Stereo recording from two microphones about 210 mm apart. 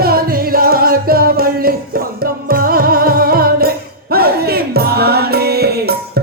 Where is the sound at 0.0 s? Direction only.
45° right (ahead or behind).